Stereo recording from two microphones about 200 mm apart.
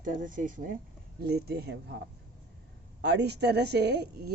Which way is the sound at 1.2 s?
55° right (ahead or behind).